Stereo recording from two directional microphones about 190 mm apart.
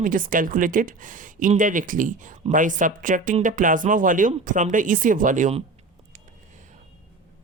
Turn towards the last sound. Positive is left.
turn(degrees=-40)  # may be behind; listen again after turning